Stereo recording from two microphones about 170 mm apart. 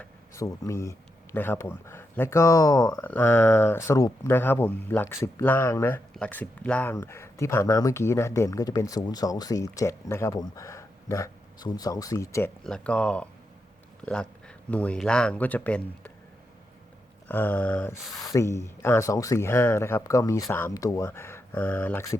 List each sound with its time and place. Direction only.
0.3 s speech: 20° left (ahead or behind)
12.6 s speech: 5° left (ahead or behind)
17.2 s speech: 10° left (ahead or behind)
18.2 s speech: 20° left (ahead or behind)